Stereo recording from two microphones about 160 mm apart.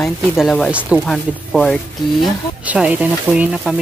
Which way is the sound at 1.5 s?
5° left (ahead or behind).